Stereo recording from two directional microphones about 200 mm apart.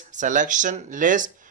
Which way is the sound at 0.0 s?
40° right (ahead or behind).